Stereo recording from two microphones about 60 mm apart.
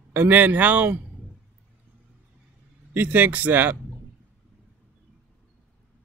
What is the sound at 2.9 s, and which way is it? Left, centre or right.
Speech, right.